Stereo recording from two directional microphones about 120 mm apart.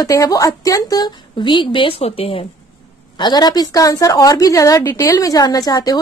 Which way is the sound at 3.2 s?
35° left (ahead or behind).